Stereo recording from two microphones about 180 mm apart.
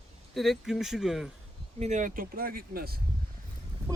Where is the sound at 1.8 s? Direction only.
40° right (ahead or behind); by 3.0 s 55° right (ahead or behind).